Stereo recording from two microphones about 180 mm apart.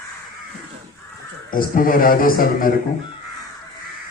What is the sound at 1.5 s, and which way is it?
A man's voice, 50° left (ahead or behind).